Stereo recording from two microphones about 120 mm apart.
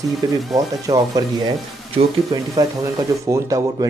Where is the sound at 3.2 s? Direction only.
30° right (ahead or behind).